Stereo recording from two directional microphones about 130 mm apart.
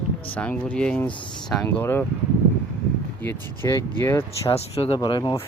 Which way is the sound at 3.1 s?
15° left (ahead or behind).